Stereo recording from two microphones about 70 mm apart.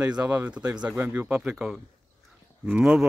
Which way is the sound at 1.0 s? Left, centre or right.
Right.